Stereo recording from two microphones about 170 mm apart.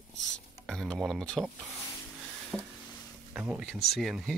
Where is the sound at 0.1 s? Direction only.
90° left.